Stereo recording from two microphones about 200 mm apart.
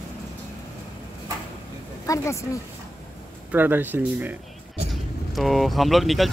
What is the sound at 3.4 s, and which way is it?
Speech, 10° right (ahead or behind).